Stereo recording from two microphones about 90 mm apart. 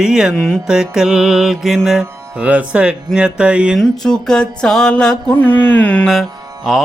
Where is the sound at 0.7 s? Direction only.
5° right (ahead or behind).